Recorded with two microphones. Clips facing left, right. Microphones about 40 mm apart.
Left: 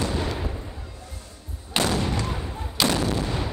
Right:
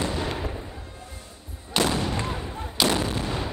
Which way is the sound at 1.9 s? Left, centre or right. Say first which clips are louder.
Left 1 dB; right.